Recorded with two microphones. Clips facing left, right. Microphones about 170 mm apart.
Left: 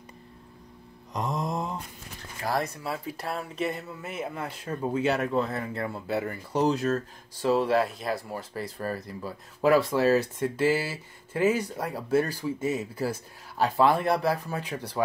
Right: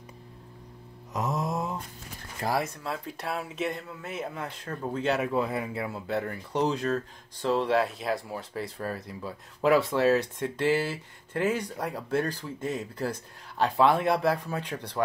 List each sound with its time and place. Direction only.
1.1 s mantra: 5° right (ahead or behind)
2.4 s speech: 25° right (ahead or behind)
2.8 s speech: 5° left (ahead or behind)
5.2 s speech: 10° right (ahead or behind)